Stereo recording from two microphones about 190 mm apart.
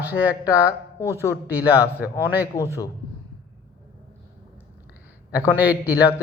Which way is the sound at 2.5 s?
15° left (ahead or behind).